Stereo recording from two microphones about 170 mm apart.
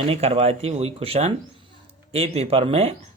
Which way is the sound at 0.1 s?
35° right (ahead or behind).